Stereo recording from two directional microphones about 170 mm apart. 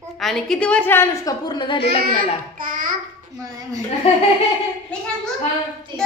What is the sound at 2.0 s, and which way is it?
A child's voice, 55° right (ahead or behind).